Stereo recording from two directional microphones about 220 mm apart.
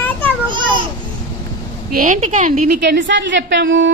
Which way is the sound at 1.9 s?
35° right (ahead or behind).